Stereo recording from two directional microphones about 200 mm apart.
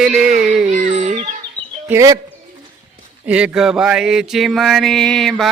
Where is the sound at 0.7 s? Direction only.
40° right (ahead or behind).